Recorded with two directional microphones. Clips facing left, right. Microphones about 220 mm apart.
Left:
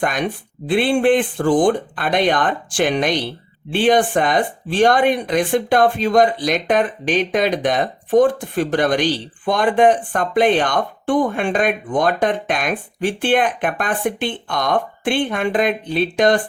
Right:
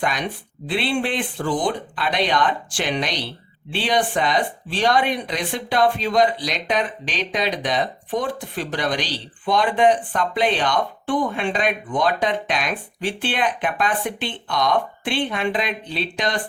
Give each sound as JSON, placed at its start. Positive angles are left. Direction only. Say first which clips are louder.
{"t": 0.0, "sound": "speech", "louder": "left 4 dB", "side_deg": 50}